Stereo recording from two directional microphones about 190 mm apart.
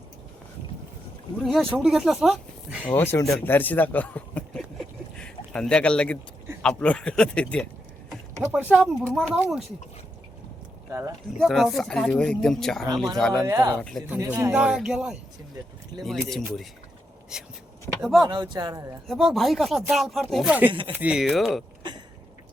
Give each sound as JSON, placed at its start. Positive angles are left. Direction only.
{"t": 1.5, "sound": "speech", "side_deg": 0}
{"t": 2.8, "sound": "a man's voice", "side_deg": 10}
{"t": 8.4, "sound": "speech", "side_deg": -5}
{"t": 11.3, "sound": "speech", "side_deg": 0}
{"t": 13.5, "sound": "speech", "side_deg": -15}
{"t": 13.7, "sound": "speech", "side_deg": 5}
{"t": 14.3, "sound": "speech", "side_deg": -15}
{"t": 14.5, "sound": "speech", "side_deg": -5}
{"t": 18.0, "sound": "speech", "side_deg": 0}
{"t": 18.3, "sound": "speech", "side_deg": -25}
{"t": 19.0, "sound": "speech", "side_deg": 0}
{"t": 21.8, "sound": "a sound", "side_deg": -25}